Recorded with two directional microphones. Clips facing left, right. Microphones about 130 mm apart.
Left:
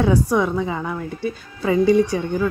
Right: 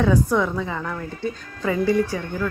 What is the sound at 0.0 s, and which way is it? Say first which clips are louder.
Speech: left 1 dB; 15° left (ahead or behind).